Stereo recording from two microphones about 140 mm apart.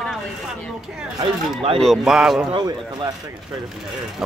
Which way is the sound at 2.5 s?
30° right (ahead or behind).